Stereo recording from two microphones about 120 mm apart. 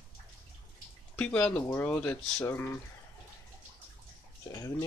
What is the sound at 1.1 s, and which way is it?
Speech, 10° left (ahead or behind).